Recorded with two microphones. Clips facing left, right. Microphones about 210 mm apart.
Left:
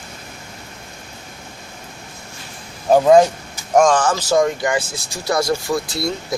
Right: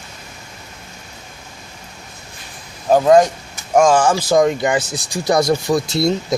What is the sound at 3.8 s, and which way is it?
Speech, 10° right (ahead or behind).